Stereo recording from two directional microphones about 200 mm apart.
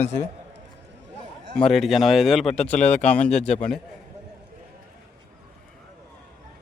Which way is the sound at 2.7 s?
35° left (ahead or behind).